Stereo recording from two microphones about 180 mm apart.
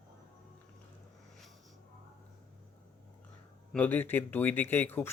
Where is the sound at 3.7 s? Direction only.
10° left (ahead or behind).